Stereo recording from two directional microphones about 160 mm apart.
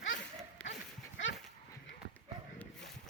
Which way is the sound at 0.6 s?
10° left (ahead or behind).